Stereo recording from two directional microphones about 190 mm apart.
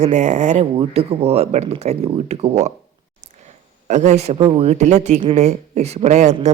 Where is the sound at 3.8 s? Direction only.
35° right (ahead or behind).